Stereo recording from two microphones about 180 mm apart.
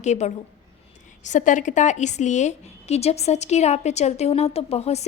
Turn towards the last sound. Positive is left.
turn(degrees=35)  # may be behind; listen again after turning